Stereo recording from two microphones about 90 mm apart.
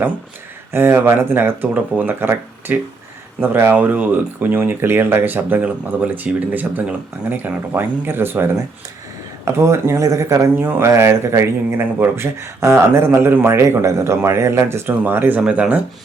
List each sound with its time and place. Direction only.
0.7 s speech: 25° right (ahead or behind)
10.5 s speech: 25° right (ahead or behind)